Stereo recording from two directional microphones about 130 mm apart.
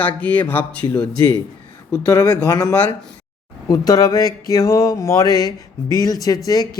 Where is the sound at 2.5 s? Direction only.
30° left (ahead or behind).